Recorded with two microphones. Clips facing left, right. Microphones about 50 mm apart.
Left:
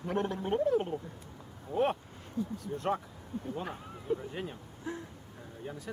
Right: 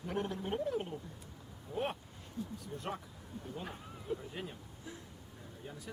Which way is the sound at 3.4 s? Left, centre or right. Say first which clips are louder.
Left 5 dB; centre.